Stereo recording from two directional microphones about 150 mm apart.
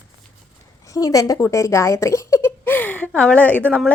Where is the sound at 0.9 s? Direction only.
25° left (ahead or behind).